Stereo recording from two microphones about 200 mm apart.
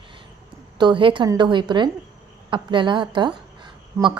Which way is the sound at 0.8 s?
25° right (ahead or behind).